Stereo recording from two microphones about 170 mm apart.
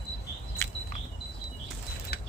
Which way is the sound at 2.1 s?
65° left (ahead or behind).